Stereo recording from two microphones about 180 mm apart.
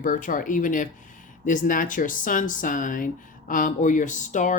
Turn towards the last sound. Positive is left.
turn(degrees=45)  # may be behind; listen again after turning